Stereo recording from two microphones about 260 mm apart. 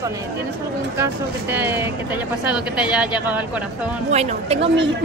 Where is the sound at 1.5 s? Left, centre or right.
Centre.